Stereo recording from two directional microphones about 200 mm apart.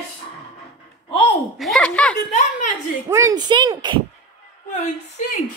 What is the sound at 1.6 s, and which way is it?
Speech, 5° left (ahead or behind).